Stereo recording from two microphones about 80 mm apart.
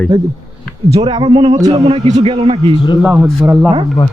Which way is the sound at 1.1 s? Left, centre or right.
Right.